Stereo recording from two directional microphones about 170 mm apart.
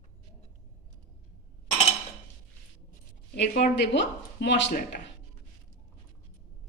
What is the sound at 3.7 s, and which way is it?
A man's voice, 90° left.